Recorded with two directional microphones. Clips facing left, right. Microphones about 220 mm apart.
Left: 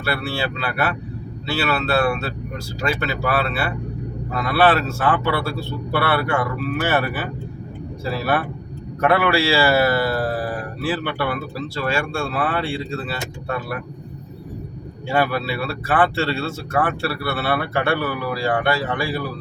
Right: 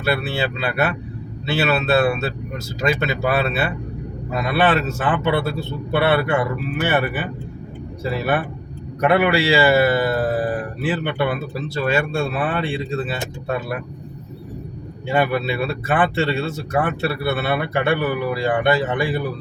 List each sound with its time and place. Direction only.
0.0 s a man's voice: 20° right (ahead or behind)
15.0 s speech: 15° right (ahead or behind)